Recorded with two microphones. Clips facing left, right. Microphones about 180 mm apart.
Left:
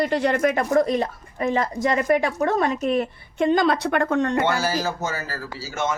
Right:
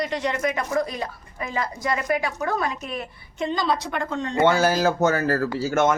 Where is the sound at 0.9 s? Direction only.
40° left (ahead or behind).